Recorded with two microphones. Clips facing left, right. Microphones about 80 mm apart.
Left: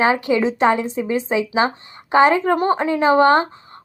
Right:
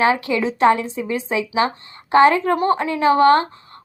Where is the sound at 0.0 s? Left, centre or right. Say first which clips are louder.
Left 1 dB; left.